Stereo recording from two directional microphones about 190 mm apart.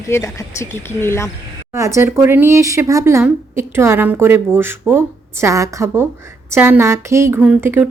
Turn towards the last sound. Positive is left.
turn(degrees=-10)  # may be behind; listen again after turning